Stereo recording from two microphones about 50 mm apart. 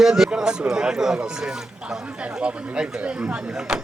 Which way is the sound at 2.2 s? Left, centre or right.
Right.